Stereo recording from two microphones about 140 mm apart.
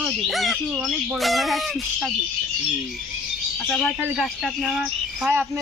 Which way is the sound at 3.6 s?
5° left (ahead or behind).